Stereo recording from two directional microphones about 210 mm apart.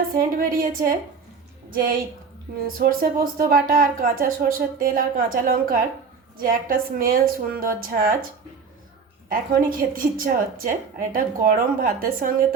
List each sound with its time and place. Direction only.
0.2 s a woman's voice: 40° right (ahead or behind)
9.3 s a woman's voice: 40° right (ahead or behind)